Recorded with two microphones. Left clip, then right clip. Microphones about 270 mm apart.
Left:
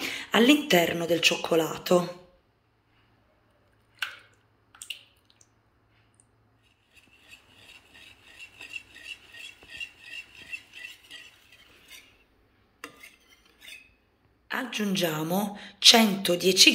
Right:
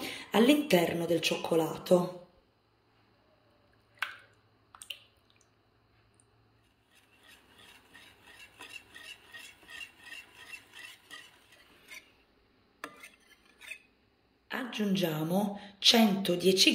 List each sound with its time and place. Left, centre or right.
0.0 s a woman's voice: centre
7.9 s a sound: right
14.5 s a woman's voice: centre